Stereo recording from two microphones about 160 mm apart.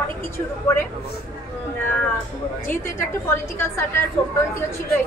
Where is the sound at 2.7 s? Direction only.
15° left (ahead or behind).